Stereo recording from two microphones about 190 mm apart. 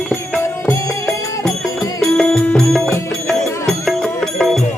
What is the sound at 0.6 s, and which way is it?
Music, 15° left (ahead or behind).